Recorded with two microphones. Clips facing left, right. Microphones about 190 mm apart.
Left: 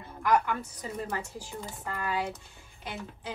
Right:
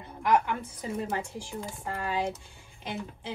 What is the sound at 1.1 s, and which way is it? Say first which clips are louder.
Speech: right 3 dB; 25° right (ahead or behind).